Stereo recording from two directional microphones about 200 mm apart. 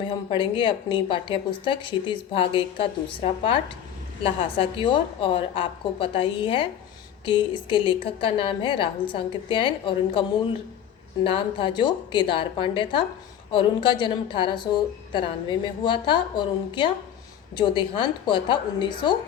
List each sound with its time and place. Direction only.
0.1 s a woman's voice: 25° left (ahead or behind)